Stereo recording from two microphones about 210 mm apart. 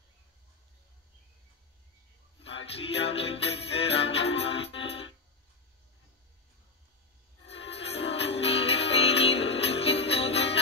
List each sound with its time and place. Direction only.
2.5 s music: 30° left (ahead or behind)
7.4 s music: 30° left (ahead or behind)